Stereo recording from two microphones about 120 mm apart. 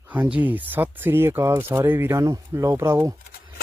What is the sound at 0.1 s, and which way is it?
Speech, 10° right (ahead or behind).